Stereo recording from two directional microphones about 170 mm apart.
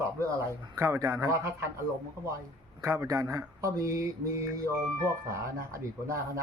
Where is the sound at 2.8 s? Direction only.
15° right (ahead or behind).